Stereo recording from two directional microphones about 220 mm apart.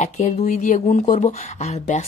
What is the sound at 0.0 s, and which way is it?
Speech, 30° left (ahead or behind).